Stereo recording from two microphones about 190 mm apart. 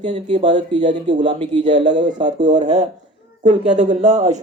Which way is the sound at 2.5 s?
40° right (ahead or behind).